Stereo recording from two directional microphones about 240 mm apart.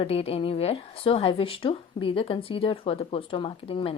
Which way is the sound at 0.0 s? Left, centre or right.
Left.